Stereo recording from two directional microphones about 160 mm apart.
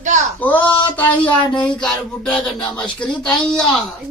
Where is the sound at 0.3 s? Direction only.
10° left (ahead or behind).